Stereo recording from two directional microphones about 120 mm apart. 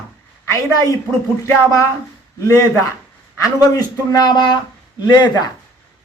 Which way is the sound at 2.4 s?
25° left (ahead or behind).